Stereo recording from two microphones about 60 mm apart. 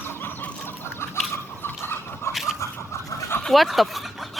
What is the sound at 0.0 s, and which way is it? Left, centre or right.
Chicken, left.